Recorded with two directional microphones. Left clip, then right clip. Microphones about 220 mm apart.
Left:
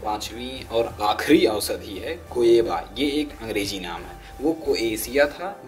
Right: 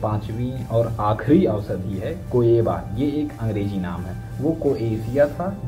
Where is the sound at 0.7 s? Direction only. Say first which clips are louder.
Right 1 dB; 35° left (ahead or behind).